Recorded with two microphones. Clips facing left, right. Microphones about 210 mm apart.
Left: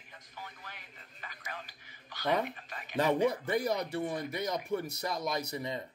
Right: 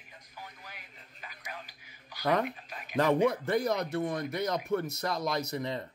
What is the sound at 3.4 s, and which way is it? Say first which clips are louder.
Speech: right 2 dB; 5° left (ahead or behind).